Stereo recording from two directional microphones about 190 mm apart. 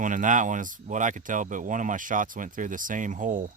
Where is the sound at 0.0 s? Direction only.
45° right (ahead or behind).